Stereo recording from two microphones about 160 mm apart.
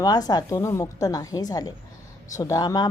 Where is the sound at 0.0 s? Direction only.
25° left (ahead or behind).